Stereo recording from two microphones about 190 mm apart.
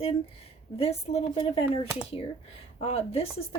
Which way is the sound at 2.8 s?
30° left (ahead or behind).